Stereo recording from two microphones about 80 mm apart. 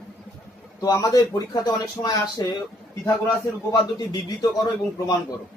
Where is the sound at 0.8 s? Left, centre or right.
Left.